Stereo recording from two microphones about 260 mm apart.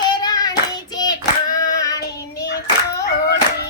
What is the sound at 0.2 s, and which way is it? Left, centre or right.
Hands, centre.